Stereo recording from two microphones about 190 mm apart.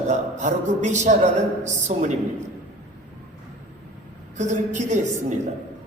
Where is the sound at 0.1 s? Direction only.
40° right (ahead or behind).